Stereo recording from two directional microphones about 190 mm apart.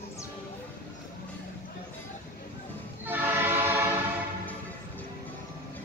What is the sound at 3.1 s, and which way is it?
Train, 10° right (ahead or behind).